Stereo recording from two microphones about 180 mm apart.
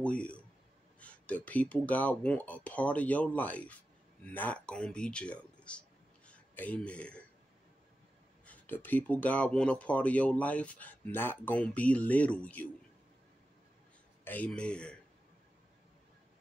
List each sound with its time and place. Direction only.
0.0 s speech: 5° left (ahead or behind)
8.5 s speech: 10° left (ahead or behind)
14.2 s a man's voice: 10° left (ahead or behind)